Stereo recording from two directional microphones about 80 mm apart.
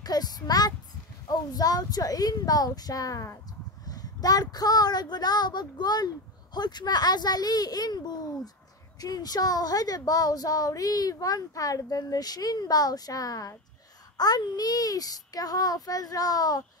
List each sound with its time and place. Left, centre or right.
0.0 s speech: left